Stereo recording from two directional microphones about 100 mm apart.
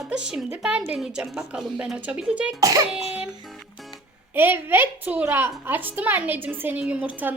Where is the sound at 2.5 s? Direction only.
35° right (ahead or behind).